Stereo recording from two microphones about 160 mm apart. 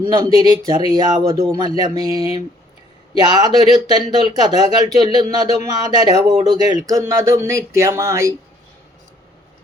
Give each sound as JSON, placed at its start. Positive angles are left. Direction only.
{"t": 0.1, "sound": "speech", "side_deg": -25}